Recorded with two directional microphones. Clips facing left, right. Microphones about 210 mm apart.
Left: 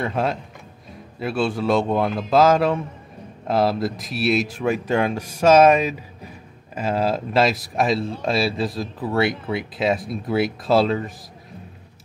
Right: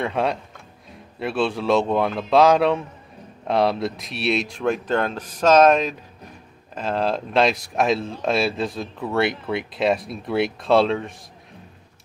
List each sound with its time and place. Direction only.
0.0 s speech: centre (ahead or behind)